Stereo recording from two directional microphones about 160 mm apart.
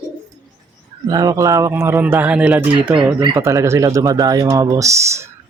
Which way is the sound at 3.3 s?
20° right (ahead or behind).